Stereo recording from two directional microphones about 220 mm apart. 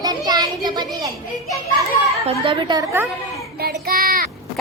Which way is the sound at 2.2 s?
25° right (ahead or behind).